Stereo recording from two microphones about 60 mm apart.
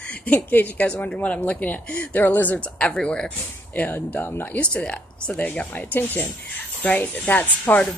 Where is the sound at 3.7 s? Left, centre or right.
Left.